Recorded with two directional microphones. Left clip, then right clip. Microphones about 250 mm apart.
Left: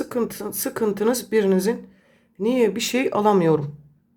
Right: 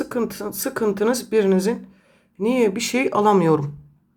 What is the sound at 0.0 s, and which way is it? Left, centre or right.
Speech, centre.